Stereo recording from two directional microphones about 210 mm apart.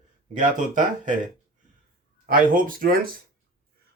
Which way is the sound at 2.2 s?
40° right (ahead or behind).